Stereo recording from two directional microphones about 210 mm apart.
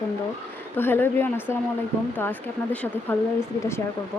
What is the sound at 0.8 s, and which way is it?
Speech, 10° left (ahead or behind).